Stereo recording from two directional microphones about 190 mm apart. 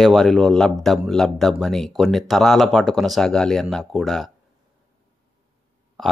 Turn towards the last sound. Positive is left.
turn(degrees=0)  # may be behind; listen again after turning